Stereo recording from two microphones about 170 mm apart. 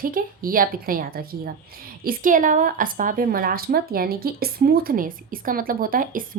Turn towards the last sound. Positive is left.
turn(degrees=-55)  # may be behind; listen again after turning